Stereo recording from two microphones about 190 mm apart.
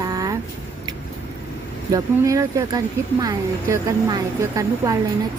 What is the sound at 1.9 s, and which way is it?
A woman's voice, 15° right (ahead or behind).